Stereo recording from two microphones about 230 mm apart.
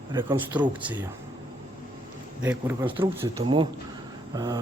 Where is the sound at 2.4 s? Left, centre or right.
Centre.